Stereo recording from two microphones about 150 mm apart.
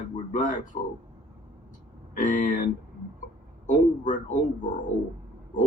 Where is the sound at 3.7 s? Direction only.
60° left (ahead or behind).